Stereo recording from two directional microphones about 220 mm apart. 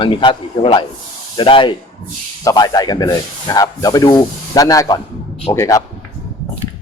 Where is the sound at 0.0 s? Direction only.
20° left (ahead or behind).